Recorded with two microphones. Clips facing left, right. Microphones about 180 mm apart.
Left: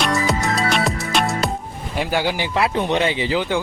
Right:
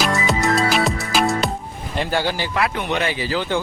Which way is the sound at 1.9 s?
5° left (ahead or behind).